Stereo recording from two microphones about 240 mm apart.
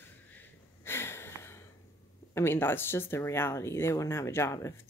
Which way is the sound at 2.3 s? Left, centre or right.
Centre.